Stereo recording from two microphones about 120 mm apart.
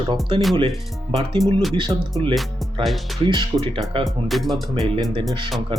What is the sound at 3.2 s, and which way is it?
Speech, 40° right (ahead or behind).